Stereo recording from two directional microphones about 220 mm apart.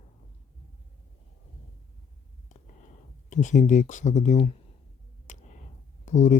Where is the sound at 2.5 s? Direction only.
35° left (ahead or behind).